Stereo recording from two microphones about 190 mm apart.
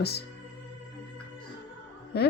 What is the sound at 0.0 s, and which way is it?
Speech, 60° left (ahead or behind).